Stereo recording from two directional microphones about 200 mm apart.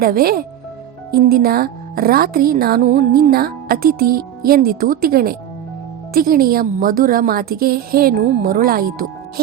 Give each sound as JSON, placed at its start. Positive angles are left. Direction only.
{"t": 0.0, "sound": "a woman's voice", "side_deg": -50}